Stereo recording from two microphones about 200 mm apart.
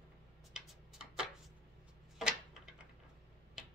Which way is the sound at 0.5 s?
5° right (ahead or behind).